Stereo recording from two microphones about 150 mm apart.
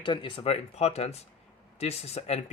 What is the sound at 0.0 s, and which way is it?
Speech, 35° left (ahead or behind).